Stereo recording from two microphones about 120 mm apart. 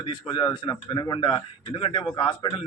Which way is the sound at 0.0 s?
40° left (ahead or behind).